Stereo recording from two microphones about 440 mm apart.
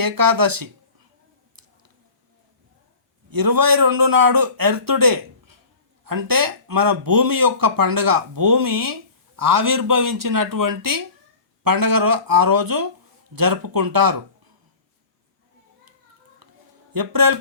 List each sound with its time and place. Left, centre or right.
0.0 s speech: right
3.2 s speech: right
16.9 s speech: right